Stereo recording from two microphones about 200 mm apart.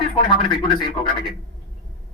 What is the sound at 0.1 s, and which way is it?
Speech, 25° left (ahead or behind).